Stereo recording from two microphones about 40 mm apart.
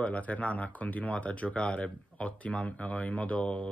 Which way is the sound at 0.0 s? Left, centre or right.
Left.